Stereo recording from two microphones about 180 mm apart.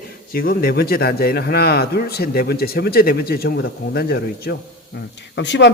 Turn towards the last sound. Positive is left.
turn(degrees=75)  # may be behind; listen again after turning